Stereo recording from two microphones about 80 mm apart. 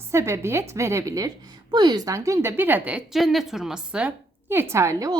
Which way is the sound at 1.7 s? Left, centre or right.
Right.